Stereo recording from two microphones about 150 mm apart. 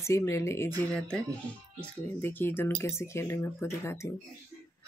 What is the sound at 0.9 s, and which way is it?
A child's voice, 5° left (ahead or behind).